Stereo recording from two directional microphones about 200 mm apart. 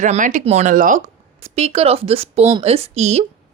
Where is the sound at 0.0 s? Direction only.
40° right (ahead or behind).